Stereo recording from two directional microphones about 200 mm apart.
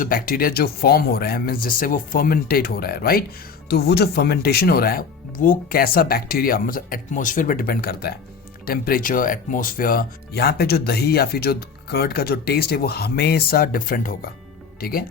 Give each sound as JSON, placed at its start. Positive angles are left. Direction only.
{"t": 0.0, "sound": "speech", "side_deg": 45}